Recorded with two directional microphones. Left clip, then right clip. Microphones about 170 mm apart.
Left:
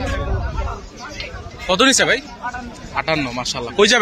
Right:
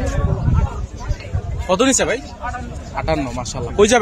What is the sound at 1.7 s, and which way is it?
A man's voice, 5° right (ahead or behind).